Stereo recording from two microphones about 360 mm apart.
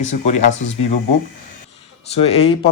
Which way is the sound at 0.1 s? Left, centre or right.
Centre.